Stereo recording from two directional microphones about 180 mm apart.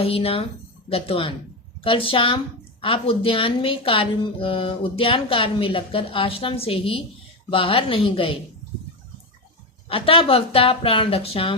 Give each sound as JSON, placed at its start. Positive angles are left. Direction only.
{"t": 0.0, "sound": "speech", "side_deg": 35}
{"t": 9.9, "sound": "speech", "side_deg": 30}